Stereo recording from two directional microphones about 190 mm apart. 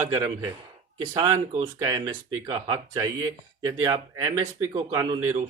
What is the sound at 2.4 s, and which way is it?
Speech, 20° right (ahead or behind).